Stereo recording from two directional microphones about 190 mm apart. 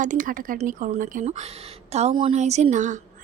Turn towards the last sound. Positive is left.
turn(degrees=-40)  # may be behind; listen again after turning